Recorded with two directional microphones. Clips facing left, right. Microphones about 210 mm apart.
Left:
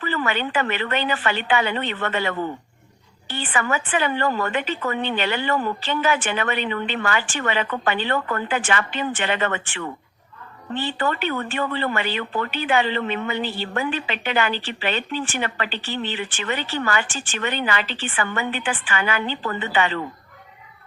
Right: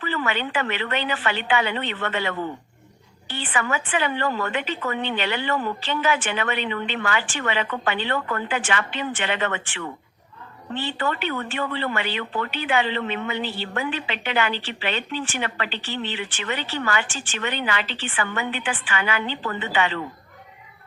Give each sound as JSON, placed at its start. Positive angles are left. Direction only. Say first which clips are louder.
{"t": 0.0, "sound": "speech", "louder": "left 2 dB", "side_deg": 45}